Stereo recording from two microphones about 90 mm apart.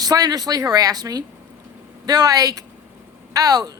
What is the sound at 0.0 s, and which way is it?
Speech, 45° right (ahead or behind).